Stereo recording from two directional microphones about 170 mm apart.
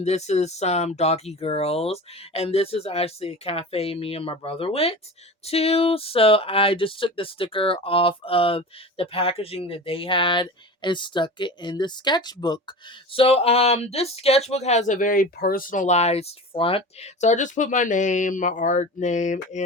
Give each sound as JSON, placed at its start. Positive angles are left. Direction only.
{"t": 0.0, "sound": "speech", "side_deg": 40}